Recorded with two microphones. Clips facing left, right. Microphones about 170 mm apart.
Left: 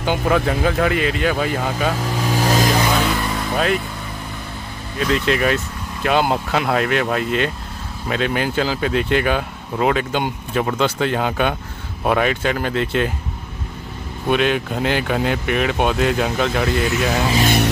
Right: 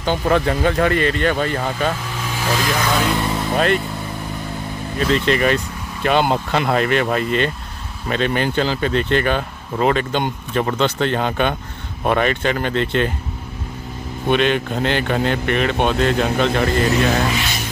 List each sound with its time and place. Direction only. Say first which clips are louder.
0.0 s speech: right 1 dB; 5° left (ahead or behind)
2.0 s vehicle: left 4 dB; 40° left (ahead or behind)
2.9 s music: even; centre (ahead or behind)
3.2 s music: right 2 dB; 20° right (ahead or behind)
3.4 s speech: right 2 dB; centre (ahead or behind)
4.9 s speech: right 1 dB; centre (ahead or behind)
14.2 s speech: right 1 dB; 5° left (ahead or behind)